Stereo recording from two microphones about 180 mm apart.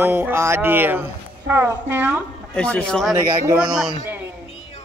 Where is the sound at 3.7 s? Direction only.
5° right (ahead or behind).